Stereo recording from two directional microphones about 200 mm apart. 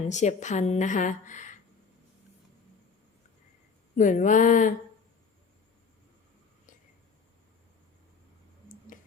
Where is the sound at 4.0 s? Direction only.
40° left (ahead or behind).